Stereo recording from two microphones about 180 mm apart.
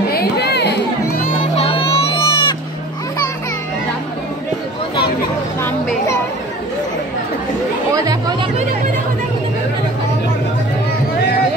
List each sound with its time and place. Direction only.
0.1 s music: 65° left (ahead or behind)
1.6 s baby cry: 30° left (ahead or behind)
7.9 s chatter: 20° right (ahead or behind)